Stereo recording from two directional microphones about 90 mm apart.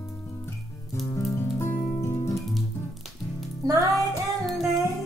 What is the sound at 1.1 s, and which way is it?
Music, 35° left (ahead or behind).